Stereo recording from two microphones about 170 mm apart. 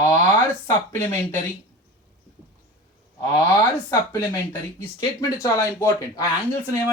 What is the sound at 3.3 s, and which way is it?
Speech, 20° left (ahead or behind).